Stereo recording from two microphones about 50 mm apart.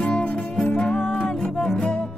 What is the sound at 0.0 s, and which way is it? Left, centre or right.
Music, left.